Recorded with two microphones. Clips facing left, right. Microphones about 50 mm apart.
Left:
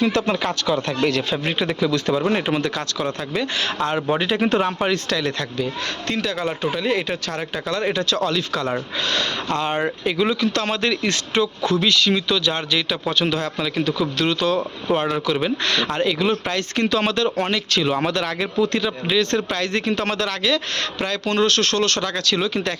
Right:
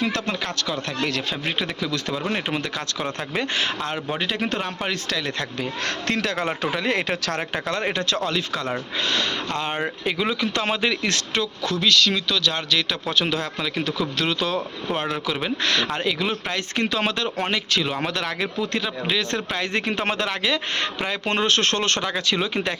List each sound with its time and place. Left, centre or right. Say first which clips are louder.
0.0 s speech: left 5 dB; centre
3.3 s speech: even; right
3.8 s speech: left 6 dB; centre
5.0 s speech: left 4 dB; centre
5.8 s speech: even; right
7.9 s speech: left 3 dB; right
9.5 s speech: left 4 dB; centre
11.3 s speech: left 5 dB; centre
13.1 s a man's voice: left 3 dB; centre
19.8 s speech: left 2 dB; right